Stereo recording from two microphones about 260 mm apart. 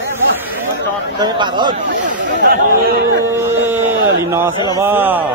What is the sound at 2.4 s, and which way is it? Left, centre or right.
Speech, right.